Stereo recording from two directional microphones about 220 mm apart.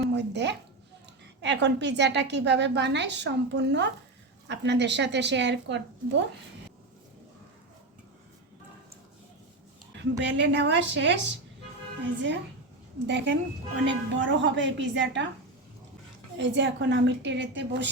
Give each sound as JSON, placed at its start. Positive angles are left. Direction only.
{"t": 0.2, "sound": "a woman's voice", "side_deg": -50}
{"t": 10.0, "sound": "a woman's voice", "side_deg": -55}
{"t": 13.1, "sound": "a woman's voice", "side_deg": -55}
{"t": 16.4, "sound": "a woman's voice", "side_deg": -55}